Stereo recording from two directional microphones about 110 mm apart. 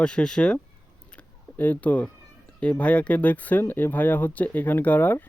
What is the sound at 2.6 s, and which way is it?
Speech, 10° left (ahead or behind).